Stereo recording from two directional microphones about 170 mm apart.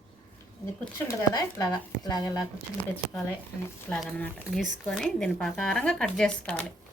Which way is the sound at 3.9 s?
5° left (ahead or behind).